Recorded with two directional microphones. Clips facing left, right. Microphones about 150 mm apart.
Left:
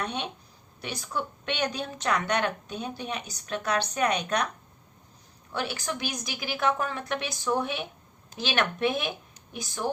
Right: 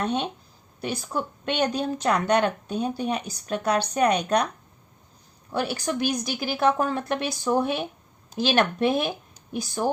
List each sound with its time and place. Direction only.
0.0 s speech: 35° right (ahead or behind)
5.5 s speech: 35° right (ahead or behind)